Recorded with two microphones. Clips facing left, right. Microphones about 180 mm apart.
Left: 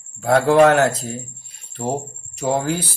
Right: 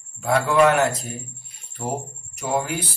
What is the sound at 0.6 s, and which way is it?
Speech, 80° left.